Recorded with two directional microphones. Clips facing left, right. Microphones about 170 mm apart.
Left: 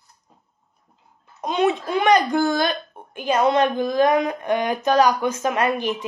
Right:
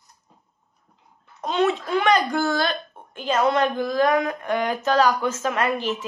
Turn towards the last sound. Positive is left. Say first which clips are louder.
# left 2 dB
turn(degrees=15)  # may be behind; listen again after turning